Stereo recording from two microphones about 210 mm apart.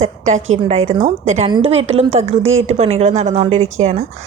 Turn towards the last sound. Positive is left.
turn(degrees=-35)  # may be behind; listen again after turning